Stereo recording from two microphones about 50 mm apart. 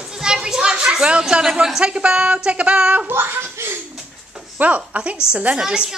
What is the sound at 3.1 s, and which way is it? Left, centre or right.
Laughter, right.